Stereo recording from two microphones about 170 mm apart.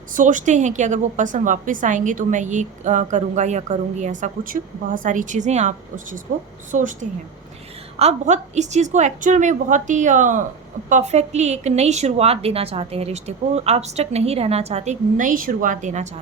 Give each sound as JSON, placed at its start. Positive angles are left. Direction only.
{"t": 0.1, "sound": "a woman's voice", "side_deg": -50}